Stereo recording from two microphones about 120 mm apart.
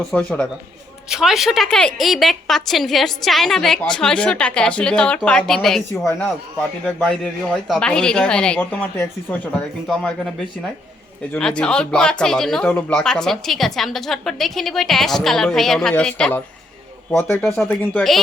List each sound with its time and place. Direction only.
0.1 s a man's voice: 10° left (ahead or behind)
1.1 s a man's voice: 5° right (ahead or behind)
11.3 s speech: 5° left (ahead or behind)
17.2 s a man's voice: 20° left (ahead or behind)